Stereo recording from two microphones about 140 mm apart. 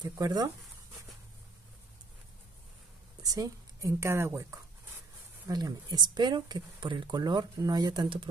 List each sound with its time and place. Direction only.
0.0 s speech: 30° right (ahead or behind)
3.2 s speech: 25° right (ahead or behind)